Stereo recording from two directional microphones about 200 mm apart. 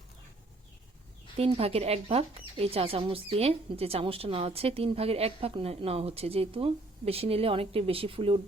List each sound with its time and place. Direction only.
1.4 s a woman's voice: 30° right (ahead or behind)